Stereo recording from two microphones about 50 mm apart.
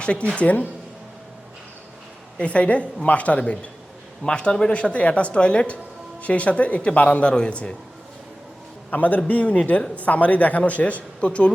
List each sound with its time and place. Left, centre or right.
0.0 s speech: left
2.4 s a man's voice: left
8.9 s a man's voice: left